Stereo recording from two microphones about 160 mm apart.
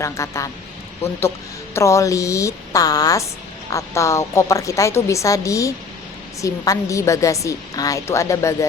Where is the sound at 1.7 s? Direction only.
20° left (ahead or behind).